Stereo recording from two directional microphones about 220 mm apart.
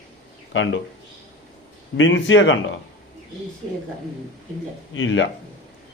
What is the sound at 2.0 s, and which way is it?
Speech, 60° left (ahead or behind).